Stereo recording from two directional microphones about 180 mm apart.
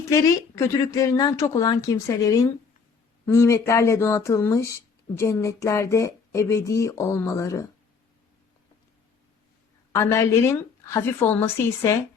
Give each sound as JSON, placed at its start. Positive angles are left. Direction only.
{"t": 0.0, "sound": "speech", "side_deg": 15}
{"t": 9.9, "sound": "speech", "side_deg": 15}